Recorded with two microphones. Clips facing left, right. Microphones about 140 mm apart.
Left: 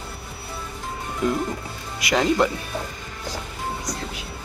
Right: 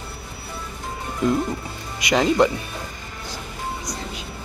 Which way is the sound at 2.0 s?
Centre (ahead or behind).